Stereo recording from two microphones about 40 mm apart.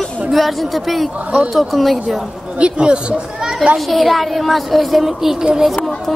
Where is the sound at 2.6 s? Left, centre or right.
Right.